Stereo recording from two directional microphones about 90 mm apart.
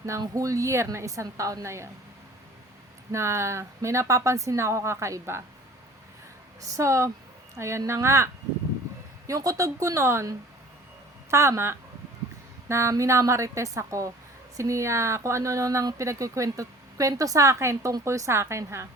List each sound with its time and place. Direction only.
0.2 s speech: 40° right (ahead or behind)
3.1 s speech: 30° right (ahead or behind)
6.6 s speech: 35° right (ahead or behind)